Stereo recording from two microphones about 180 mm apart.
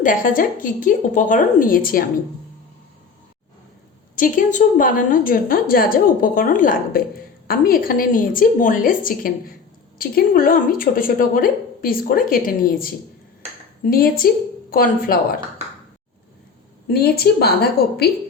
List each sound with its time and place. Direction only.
0.0 s speech: 50° left (ahead or behind)
4.1 s speech: 45° left (ahead or behind)
13.9 s a woman's voice: 55° left (ahead or behind)
16.9 s a woman's voice: 60° left (ahead or behind)